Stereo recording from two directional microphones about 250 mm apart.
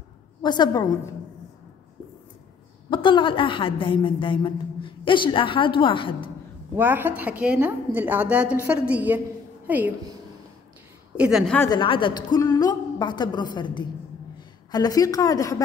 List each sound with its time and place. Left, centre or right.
0.4 s a woman's voice: centre
2.9 s a woman's voice: centre
6.7 s a woman's voice: centre
11.1 s a woman's voice: centre
11.7 s a woman's voice: centre